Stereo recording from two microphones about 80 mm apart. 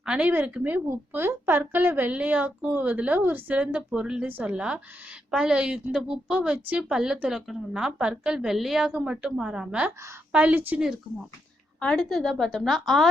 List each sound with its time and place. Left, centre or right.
0.0 s a woman's voice: centre
8.9 s a woman's voice: centre
11.8 s a woman's voice: centre